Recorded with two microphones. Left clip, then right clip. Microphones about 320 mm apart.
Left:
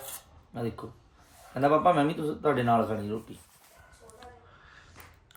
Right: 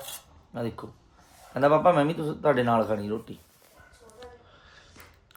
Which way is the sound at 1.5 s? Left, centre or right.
Centre.